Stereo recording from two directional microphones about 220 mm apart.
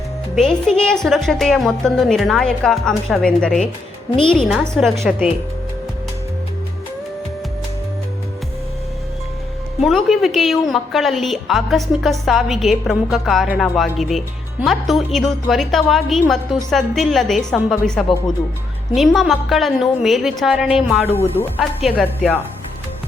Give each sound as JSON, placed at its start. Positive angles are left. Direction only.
{"t": 0.3, "sound": "a woman's voice", "side_deg": 0}
{"t": 9.8, "sound": "a woman's voice", "side_deg": 0}
{"t": 21.0, "sound": "speech", "side_deg": 30}
{"t": 21.3, "sound": "speech", "side_deg": 10}